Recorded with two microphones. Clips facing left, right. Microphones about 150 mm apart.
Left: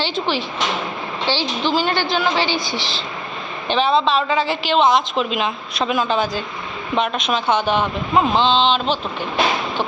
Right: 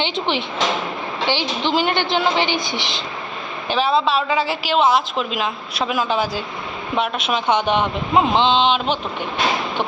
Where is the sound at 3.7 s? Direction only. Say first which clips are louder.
Left 1 dB; 5° right (ahead or behind).